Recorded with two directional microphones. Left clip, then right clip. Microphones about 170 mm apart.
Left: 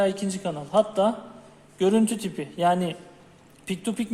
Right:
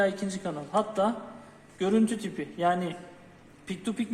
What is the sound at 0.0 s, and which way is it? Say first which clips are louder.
A man's voice: left 3 dB; 55° left (ahead or behind).